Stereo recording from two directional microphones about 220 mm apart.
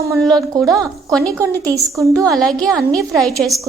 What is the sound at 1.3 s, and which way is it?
Speech, 15° right (ahead or behind).